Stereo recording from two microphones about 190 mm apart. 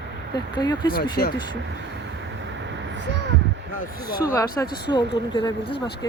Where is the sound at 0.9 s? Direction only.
55° left (ahead or behind).